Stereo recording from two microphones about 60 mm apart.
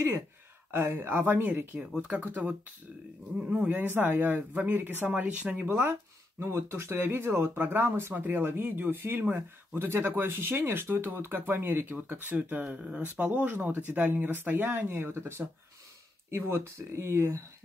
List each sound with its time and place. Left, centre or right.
0.7 s speech: right
5.7 s speech: right